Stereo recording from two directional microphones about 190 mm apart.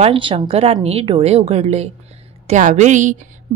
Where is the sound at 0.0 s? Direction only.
25° right (ahead or behind).